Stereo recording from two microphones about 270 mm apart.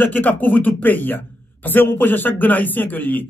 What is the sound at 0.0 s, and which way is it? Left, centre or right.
Speech, centre.